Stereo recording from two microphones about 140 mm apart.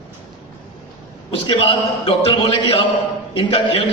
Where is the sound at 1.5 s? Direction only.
40° left (ahead or behind).